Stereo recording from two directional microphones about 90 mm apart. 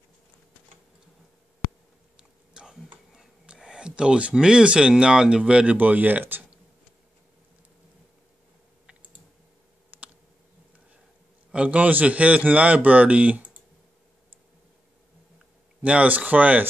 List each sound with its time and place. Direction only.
2.5 s a sound: 5° right (ahead or behind)
3.1 s speech: 5° right (ahead or behind)
9.8 s tick: 15° right (ahead or behind)
11.5 s a man's voice: 15° right (ahead or behind)
15.8 s a man's voice: 15° right (ahead or behind)